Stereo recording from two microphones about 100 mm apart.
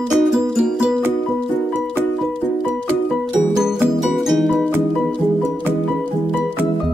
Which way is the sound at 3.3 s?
5° right (ahead or behind).